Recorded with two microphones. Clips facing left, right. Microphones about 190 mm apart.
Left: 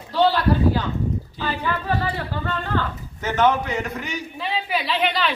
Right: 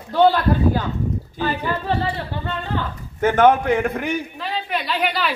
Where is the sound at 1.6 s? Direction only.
25° right (ahead or behind).